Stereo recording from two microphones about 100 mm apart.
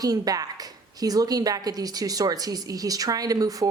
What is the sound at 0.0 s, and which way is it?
A woman's voice, 40° right (ahead or behind).